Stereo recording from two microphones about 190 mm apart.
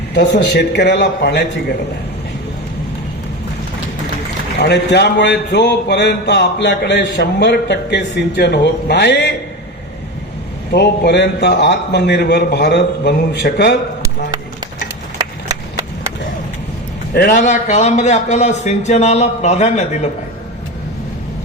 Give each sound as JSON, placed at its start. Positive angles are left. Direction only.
{"t": 0.1, "sound": "a man's voice", "side_deg": 60}
{"t": 4.6, "sound": "a man's voice", "side_deg": 65}
{"t": 10.7, "sound": "a man's voice", "side_deg": 60}
{"t": 17.2, "sound": "a man's voice", "side_deg": 45}